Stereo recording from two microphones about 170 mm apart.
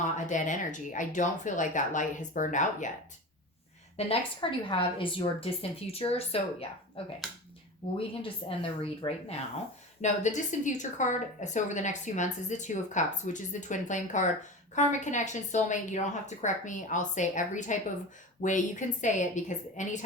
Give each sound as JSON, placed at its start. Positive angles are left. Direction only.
{"t": 0.3, "sound": "a woman's voice", "side_deg": 50}
{"t": 4.0, "sound": "a woman's voice", "side_deg": 35}
{"t": 10.0, "sound": "a woman's voice", "side_deg": 45}